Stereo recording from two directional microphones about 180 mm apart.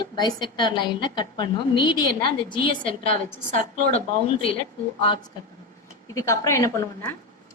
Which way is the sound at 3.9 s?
30° left (ahead or behind).